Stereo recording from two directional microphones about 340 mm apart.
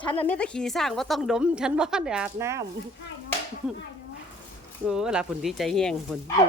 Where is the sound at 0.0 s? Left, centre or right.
Centre.